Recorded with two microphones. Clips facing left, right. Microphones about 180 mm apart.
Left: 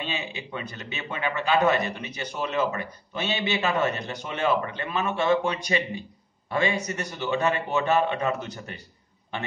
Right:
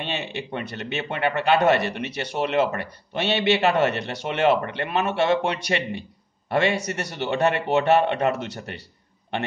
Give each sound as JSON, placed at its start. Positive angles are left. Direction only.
{"t": 0.0, "sound": "a man's voice", "side_deg": -70}